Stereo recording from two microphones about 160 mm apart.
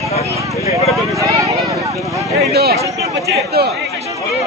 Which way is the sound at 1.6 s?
20° right (ahead or behind).